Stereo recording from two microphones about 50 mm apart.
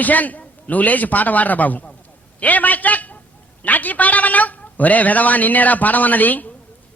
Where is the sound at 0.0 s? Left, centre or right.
Left.